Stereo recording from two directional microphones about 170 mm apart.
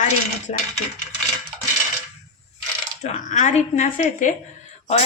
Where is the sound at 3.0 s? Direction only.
45° left (ahead or behind).